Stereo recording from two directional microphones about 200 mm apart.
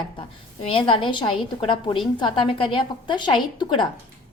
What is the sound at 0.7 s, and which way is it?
A woman's voice, 25° left (ahead or behind).